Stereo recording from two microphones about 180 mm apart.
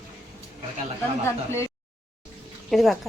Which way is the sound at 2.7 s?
Centre (ahead or behind).